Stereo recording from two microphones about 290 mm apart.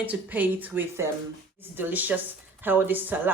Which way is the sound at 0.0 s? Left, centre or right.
Centre.